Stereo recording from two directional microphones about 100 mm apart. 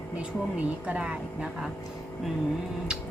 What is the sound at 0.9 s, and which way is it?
Speech, 10° right (ahead or behind).